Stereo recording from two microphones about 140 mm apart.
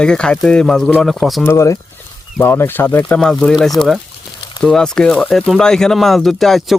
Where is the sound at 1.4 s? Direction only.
20° left (ahead or behind).